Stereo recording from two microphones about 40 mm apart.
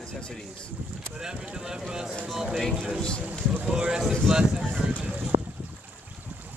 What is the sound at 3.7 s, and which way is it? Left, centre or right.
Speech, right.